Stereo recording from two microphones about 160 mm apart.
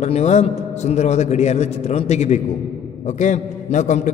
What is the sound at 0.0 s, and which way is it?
A man's voice, 45° left (ahead or behind).